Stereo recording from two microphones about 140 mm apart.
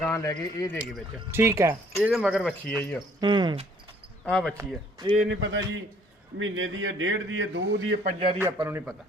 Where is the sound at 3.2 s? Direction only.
35° right (ahead or behind).